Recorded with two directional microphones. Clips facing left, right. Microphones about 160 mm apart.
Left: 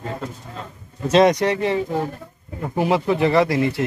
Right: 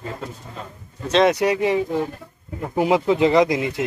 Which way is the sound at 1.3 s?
10° right (ahead or behind).